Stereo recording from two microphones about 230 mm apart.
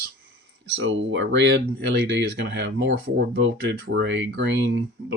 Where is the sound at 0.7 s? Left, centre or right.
Right.